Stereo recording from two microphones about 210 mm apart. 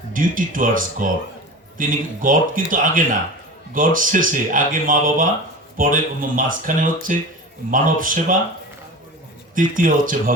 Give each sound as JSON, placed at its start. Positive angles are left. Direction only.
{"t": 0.1, "sound": "speech", "side_deg": -40}
{"t": 9.6, "sound": "speech", "side_deg": -40}